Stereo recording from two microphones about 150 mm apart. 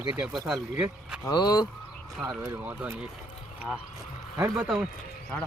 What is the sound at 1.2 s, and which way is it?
Speech, 25° left (ahead or behind).